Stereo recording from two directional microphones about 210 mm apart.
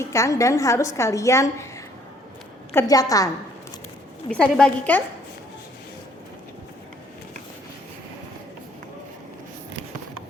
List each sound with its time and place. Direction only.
0.0 s a woman's voice: 15° left (ahead or behind)
2.7 s a woman's voice: 15° left (ahead or behind)
4.3 s a woman's voice: centre (ahead or behind)